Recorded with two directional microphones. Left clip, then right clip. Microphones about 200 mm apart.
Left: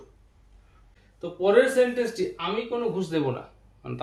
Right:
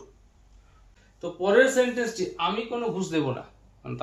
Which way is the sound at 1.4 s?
15° left (ahead or behind).